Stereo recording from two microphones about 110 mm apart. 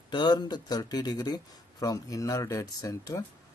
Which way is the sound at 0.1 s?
40° left (ahead or behind).